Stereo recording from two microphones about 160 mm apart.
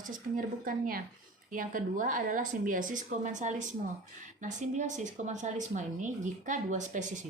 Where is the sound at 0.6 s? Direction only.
60° right (ahead or behind).